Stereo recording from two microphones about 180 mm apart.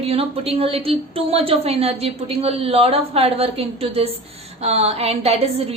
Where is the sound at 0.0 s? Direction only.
35° right (ahead or behind).